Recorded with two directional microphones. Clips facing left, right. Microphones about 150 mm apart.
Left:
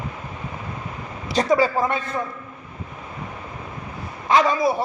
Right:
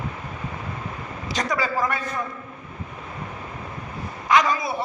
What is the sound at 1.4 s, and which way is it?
Speech, 30° left (ahead or behind).